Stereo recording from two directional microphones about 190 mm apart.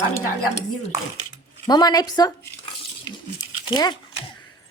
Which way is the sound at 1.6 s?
20° left (ahead or behind).